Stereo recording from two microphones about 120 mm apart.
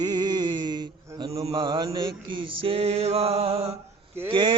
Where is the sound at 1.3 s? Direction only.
50° right (ahead or behind).